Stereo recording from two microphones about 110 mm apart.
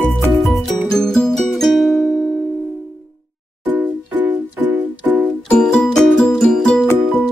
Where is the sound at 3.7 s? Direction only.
15° right (ahead or behind).